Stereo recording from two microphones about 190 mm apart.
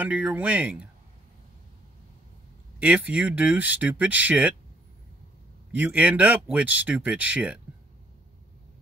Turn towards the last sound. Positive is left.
turn(degrees=-5)  # may be behind; listen again after turning